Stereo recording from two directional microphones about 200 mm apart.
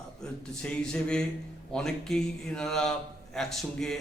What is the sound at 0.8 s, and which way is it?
A man's voice, 5° left (ahead or behind).